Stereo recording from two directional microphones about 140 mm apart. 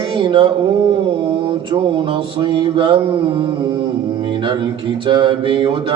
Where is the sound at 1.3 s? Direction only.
40° right (ahead or behind).